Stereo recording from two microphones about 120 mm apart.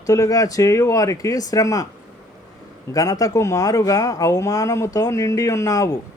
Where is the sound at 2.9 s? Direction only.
30° left (ahead or behind).